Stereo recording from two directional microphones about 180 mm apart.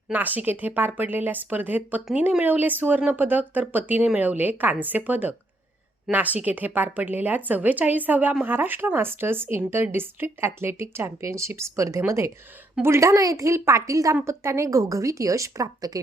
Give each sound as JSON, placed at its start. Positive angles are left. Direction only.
{"t": 0.1, "sound": "a woman's voice", "side_deg": -10}